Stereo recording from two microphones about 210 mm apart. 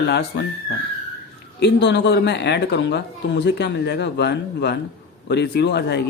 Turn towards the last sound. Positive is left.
turn(degrees=55)  # may be behind; listen again after turning